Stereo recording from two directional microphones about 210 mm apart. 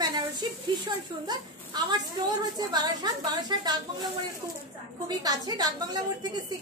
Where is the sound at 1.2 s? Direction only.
20° right (ahead or behind).